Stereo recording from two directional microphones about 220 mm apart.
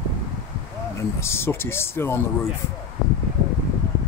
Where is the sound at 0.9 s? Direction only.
10° left (ahead or behind).